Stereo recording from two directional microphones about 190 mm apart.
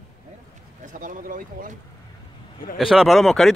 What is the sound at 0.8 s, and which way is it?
Speech, 45° right (ahead or behind).